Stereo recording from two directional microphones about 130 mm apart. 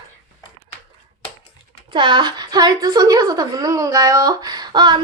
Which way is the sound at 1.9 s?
40° right (ahead or behind).